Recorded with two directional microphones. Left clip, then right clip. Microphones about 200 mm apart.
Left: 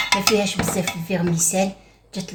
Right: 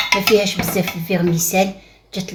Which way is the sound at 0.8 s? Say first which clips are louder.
Right 4 dB; 45° right (ahead or behind).